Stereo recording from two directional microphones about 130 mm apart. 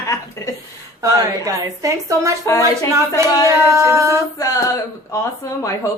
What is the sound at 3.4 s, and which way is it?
Speech, 20° right (ahead or behind).